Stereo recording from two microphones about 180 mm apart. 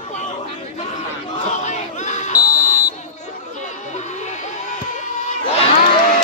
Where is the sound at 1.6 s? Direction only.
40° left (ahead or behind).